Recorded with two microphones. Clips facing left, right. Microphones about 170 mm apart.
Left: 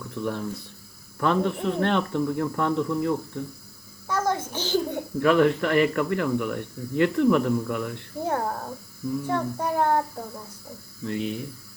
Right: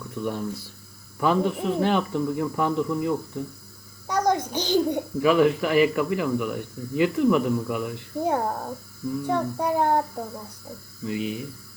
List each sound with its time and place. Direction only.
0.3 s speech: 5° right (ahead or behind)
4.0 s a sound: 15° right (ahead or behind)
5.2 s a child's voice: 5° right (ahead or behind)
11.0 s speech: 5° right (ahead or behind)